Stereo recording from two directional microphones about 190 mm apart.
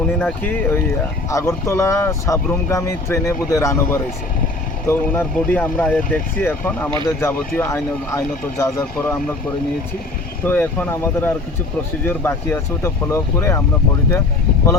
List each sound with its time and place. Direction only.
0.2 s speech: 10° left (ahead or behind)
10.4 s speech: 10° left (ahead or behind)